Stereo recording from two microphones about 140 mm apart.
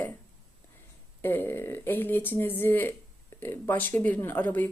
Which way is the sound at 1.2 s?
15° left (ahead or behind).